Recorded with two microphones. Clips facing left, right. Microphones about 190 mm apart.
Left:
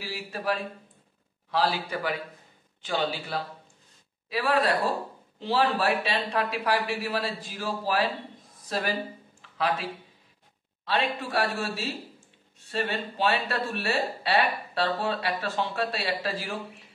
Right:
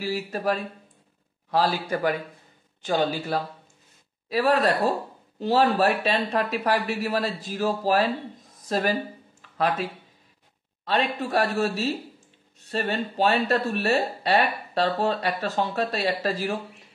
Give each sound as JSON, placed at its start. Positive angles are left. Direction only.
{"t": 0.0, "sound": "speech", "side_deg": -45}
{"t": 10.9, "sound": "speech", "side_deg": -45}